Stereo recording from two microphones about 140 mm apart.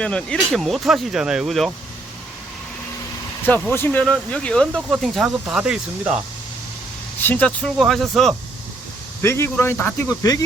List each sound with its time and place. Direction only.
0.0 s speech: 5° left (ahead or behind)
3.4 s speech: 10° left (ahead or behind); by 6.1 s 5° right (ahead or behind)
7.2 s speech: 10° left (ahead or behind)
9.2 s speech: 20° left (ahead or behind)